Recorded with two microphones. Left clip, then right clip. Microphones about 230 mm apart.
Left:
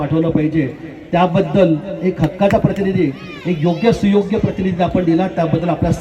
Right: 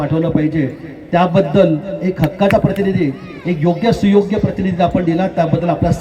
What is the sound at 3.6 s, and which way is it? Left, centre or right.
A man's voice, right.